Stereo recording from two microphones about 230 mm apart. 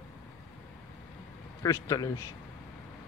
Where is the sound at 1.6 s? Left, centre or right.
Centre.